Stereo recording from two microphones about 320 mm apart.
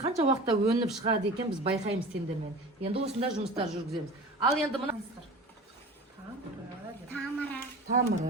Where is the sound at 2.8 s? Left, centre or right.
Centre.